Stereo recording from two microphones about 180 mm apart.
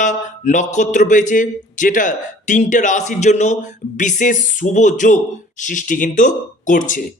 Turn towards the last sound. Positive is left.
turn(degrees=45)  # may be behind; listen again after turning